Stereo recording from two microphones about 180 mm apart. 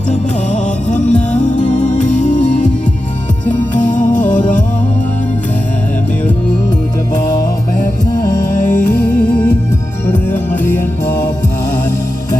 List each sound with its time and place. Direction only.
0.1 s music: 40° left (ahead or behind)
8.4 s music: 45° left (ahead or behind)
10.1 s music: 10° left (ahead or behind)